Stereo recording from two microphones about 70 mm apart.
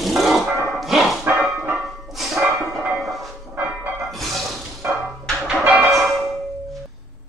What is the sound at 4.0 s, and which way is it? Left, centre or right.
Music, centre.